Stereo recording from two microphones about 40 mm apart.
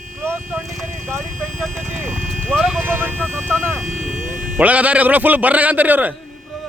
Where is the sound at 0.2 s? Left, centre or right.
Right.